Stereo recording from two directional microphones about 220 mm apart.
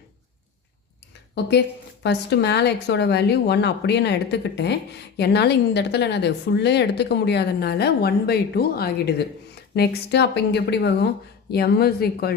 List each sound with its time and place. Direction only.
2.0 s a woman's voice: 50° left (ahead or behind)